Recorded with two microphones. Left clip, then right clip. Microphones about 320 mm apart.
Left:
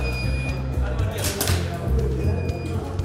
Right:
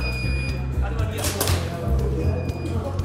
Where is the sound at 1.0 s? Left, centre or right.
Centre.